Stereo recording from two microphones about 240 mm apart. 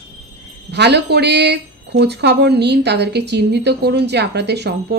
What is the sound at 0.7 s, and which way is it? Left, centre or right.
Speech, right.